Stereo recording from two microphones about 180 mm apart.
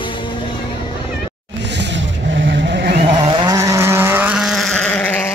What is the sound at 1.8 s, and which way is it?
Vehicle, 80° right.